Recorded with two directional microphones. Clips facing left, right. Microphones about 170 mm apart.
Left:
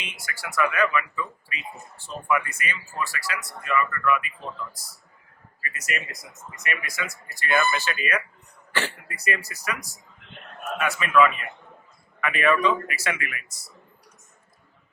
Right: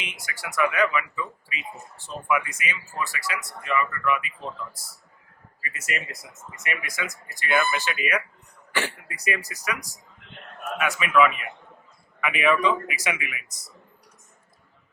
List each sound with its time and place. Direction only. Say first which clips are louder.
0.0 s speech: even; 20° right (ahead or behind)
5.6 s speech: even; 25° right (ahead or behind)